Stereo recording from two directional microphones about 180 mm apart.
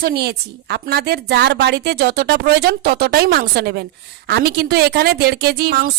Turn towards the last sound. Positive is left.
turn(degrees=-60)  # may be behind; listen again after turning